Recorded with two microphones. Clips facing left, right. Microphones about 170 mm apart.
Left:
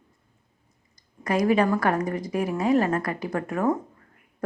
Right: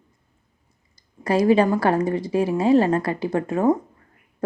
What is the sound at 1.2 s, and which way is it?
A woman's voice, 30° right (ahead or behind).